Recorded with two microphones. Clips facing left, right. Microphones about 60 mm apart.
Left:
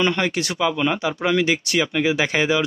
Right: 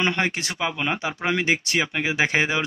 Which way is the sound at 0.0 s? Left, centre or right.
Right.